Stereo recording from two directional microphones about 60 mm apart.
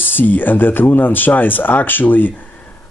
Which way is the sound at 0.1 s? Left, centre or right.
Left.